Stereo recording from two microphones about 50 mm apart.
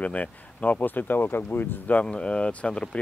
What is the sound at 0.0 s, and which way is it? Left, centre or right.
Speech, left.